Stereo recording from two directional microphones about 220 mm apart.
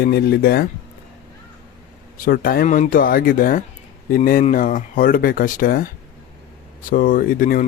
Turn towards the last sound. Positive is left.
turn(degrees=40)  # may be behind; listen again after turning